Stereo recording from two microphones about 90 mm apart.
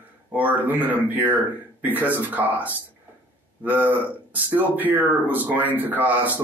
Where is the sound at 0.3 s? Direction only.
20° right (ahead or behind).